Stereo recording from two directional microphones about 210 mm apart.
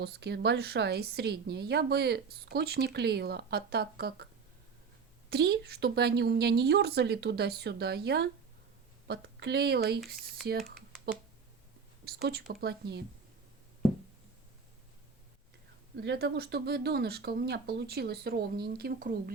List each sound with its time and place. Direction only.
0.0 s a woman's voice: 50° right (ahead or behind)
5.3 s a woman's voice: 50° right (ahead or behind)
12.0 s a woman's voice: 50° right (ahead or behind)
16.0 s a woman's voice: 50° right (ahead or behind)